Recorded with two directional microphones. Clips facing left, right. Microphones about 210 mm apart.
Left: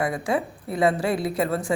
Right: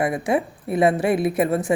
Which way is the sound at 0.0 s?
20° right (ahead or behind).